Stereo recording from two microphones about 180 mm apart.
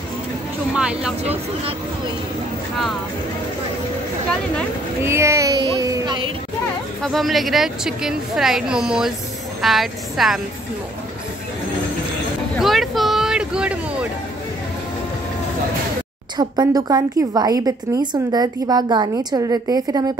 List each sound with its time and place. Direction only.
0.7 s a woman's voice: 5° right (ahead or behind)
5.0 s a child's voice: 15° right (ahead or behind)
5.8 s a sound: 20° right (ahead or behind)
7.0 s a woman's voice: centre (ahead or behind)
12.5 s a sound: centre (ahead or behind)
16.3 s a woman's voice: 20° right (ahead or behind)